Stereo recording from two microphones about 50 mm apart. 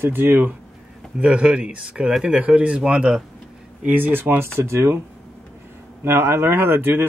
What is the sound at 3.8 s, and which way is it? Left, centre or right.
Speech, right.